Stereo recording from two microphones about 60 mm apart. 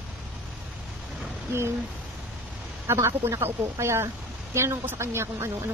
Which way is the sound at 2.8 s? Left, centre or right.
Right.